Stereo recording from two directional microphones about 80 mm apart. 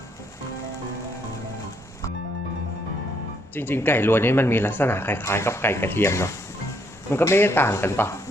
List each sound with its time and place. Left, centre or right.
3.5 s speech: left